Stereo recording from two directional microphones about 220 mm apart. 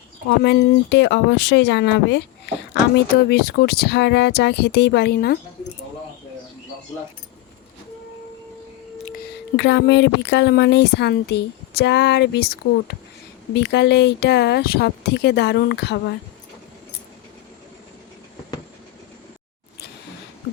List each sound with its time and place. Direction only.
0.3 s speech: 50° left (ahead or behind)
9.1 s speech: 50° left (ahead or behind)